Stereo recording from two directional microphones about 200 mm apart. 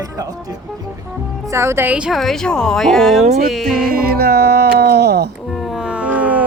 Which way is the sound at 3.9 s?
50° right (ahead or behind).